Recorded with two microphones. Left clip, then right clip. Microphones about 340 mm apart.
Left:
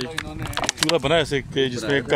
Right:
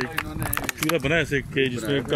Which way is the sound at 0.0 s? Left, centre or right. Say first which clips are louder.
Right 1 dB; centre.